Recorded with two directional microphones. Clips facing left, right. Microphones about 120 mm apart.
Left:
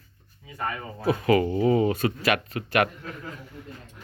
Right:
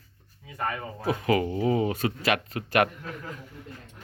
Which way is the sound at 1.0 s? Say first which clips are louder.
Left 3 dB; 15° right (ahead or behind).